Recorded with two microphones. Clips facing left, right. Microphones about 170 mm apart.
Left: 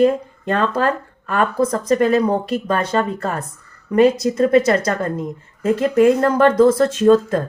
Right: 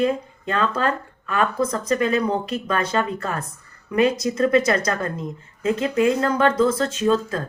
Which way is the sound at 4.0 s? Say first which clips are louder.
Left 5 dB; 35° left (ahead or behind).